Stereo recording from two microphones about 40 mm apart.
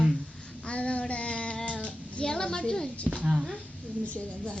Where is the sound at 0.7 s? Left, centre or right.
Left.